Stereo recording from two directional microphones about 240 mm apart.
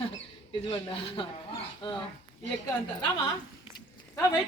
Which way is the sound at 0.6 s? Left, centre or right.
Left.